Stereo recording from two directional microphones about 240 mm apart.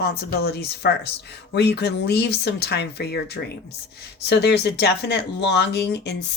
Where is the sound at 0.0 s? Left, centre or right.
Left.